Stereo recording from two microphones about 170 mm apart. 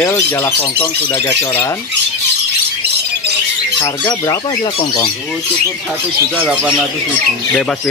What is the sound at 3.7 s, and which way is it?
Speech, 20° left (ahead or behind).